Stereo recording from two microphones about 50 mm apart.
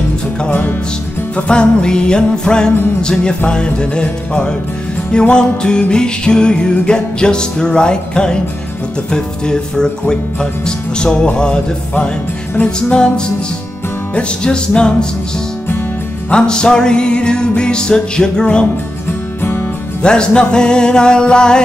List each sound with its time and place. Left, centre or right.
0.5 s music: left
1.3 s music: centre
16.3 s music: centre
20.0 s music: centre